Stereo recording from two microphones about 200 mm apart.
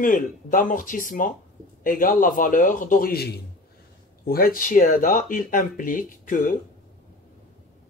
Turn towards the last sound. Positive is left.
turn(degrees=45)  # may be behind; listen again after turning